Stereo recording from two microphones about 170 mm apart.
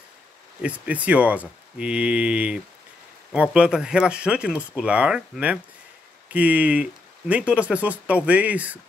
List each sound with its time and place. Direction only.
0.6 s speech: 10° right (ahead or behind)